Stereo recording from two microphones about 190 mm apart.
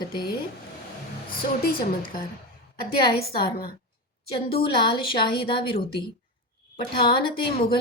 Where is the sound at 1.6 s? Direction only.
50° left (ahead or behind).